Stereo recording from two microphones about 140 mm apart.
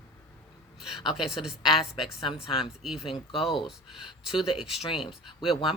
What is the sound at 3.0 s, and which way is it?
Speech, 40° left (ahead or behind).